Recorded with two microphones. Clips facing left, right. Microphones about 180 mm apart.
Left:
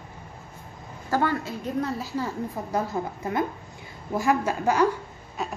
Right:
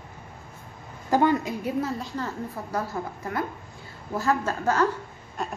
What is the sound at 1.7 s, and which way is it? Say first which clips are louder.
Speech: left 1 dB; centre (ahead or behind).